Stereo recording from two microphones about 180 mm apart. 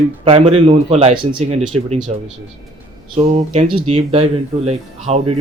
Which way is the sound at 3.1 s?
35° right (ahead or behind).